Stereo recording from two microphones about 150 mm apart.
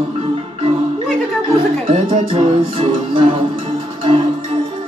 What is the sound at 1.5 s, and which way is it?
Speech, 35° right (ahead or behind).